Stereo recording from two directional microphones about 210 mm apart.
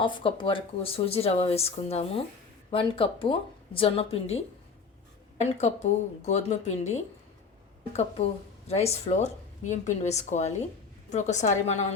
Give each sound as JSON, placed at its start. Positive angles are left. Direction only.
{"t": 0.0, "sound": "speech", "side_deg": 25}